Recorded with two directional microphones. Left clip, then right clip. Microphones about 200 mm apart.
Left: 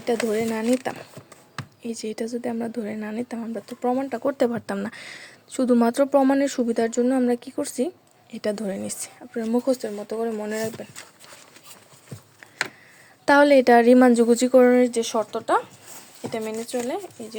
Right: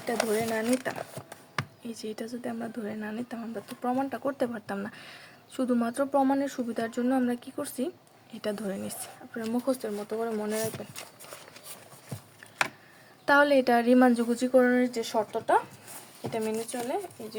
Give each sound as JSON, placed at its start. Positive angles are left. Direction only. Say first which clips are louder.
{"t": 0.0, "sound": "a woman's voice", "louder": "left 5 dB", "side_deg": 40}
{"t": 1.8, "sound": "a woman's voice", "louder": "left 8 dB", "side_deg": 35}
{"t": 13.2, "sound": "a woman's voice", "louder": "left 7 dB", "side_deg": 35}